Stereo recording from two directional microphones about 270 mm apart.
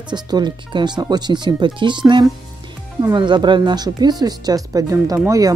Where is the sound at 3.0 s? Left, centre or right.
Centre.